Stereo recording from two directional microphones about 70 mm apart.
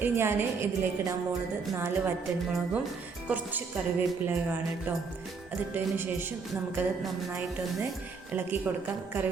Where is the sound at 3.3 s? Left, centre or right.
Right.